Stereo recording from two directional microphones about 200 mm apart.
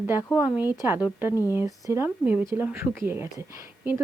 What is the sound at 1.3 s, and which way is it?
Speech, 15° left (ahead or behind).